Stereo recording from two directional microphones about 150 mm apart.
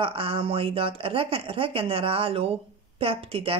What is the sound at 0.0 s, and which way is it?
Speech, 35° right (ahead or behind).